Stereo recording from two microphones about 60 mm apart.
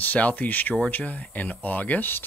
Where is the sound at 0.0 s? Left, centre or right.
Left.